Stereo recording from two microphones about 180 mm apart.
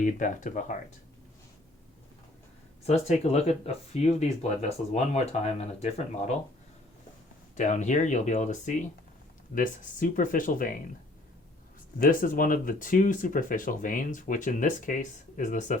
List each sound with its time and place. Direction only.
0.0 s speech: 45° left (ahead or behind)
2.8 s speech: 35° left (ahead or behind)
7.5 s speech: 40° left (ahead or behind)
11.9 s speech: 50° left (ahead or behind)